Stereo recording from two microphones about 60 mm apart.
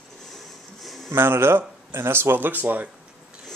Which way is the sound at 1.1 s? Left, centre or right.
Right.